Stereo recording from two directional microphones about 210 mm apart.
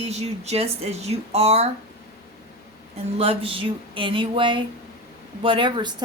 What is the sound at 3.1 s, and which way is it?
A woman's voice, 25° right (ahead or behind).